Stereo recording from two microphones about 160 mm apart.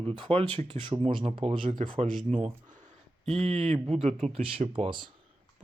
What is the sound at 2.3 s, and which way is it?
Speech, 45° right (ahead or behind).